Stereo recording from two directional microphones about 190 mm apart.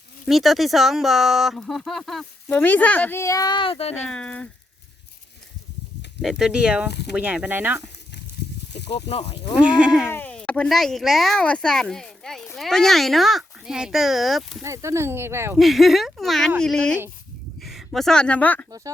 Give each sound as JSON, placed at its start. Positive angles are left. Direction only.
{"t": 0.3, "sound": "speech", "side_deg": 0}
{"t": 4.1, "sound": "speech", "side_deg": 5}
{"t": 6.2, "sound": "speech", "side_deg": 0}
{"t": 6.9, "sound": "speech", "side_deg": 60}
{"t": 7.2, "sound": "speech", "side_deg": -5}
{"t": 8.9, "sound": "speech", "side_deg": 30}
{"t": 9.6, "sound": "speech", "side_deg": -5}
{"t": 10.1, "sound": "speech", "side_deg": 10}
{"t": 14.6, "sound": "speech", "side_deg": -15}
{"t": 15.5, "sound": "a woman's voice", "side_deg": 0}